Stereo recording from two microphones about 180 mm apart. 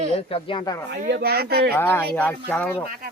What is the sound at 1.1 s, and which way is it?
Speech, 60° right (ahead or behind).